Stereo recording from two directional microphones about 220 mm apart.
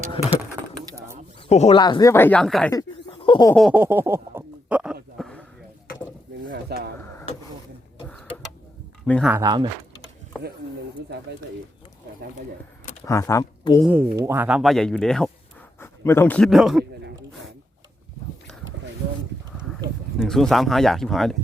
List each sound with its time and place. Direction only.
0.2 s pigeon: 25° left (ahead or behind)
0.8 s bird: 15° right (ahead or behind)
1.4 s speech: 30° left (ahead or behind); by 2.7 s 5° left (ahead or behind)
2.7 s a sound: 25° left (ahead or behind)
3.5 s speech: centre (ahead or behind)
5.1 s a sound: 5° left (ahead or behind)
6.5 s a sound: 45° right (ahead or behind)
8.0 s a sound: 5° left (ahead or behind)
9.0 s speech: 5° left (ahead or behind)
9.3 s speech: 15° right (ahead or behind)
13.1 s speech: 15° left (ahead or behind)
13.8 s a man's voice: 10° right (ahead or behind)
20.1 s speech: centre (ahead or behind)